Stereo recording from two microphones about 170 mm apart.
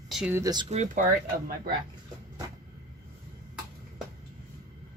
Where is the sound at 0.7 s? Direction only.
40° right (ahead or behind).